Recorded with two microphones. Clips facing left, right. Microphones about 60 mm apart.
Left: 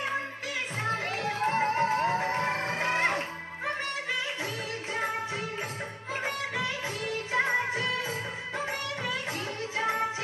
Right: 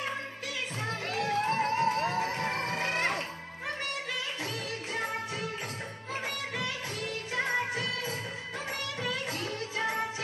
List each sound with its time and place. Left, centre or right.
1.0 s music: left
7.3 s music: left